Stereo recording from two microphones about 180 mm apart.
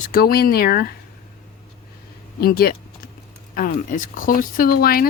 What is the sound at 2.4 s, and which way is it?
Speech, 55° left (ahead or behind).